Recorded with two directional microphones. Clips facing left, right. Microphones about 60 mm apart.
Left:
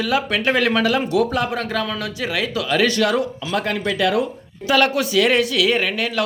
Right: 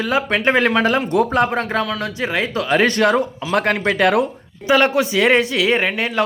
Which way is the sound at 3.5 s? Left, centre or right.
Right.